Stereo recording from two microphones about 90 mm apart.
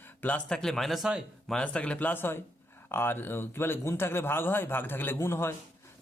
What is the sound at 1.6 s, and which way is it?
Speech, 15° left (ahead or behind).